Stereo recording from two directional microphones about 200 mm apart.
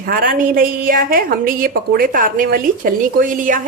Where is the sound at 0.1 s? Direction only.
45° right (ahead or behind).